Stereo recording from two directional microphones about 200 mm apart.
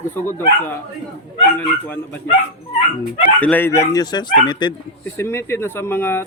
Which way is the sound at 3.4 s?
10° left (ahead or behind).